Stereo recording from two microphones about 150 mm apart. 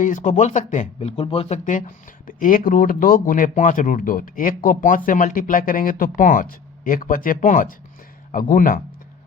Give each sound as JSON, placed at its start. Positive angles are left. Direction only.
{"t": 0.0, "sound": "speech", "side_deg": 55}
{"t": 2.2, "sound": "speech", "side_deg": 70}